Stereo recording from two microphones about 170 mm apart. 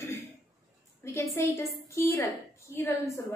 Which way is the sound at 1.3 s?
15° left (ahead or behind).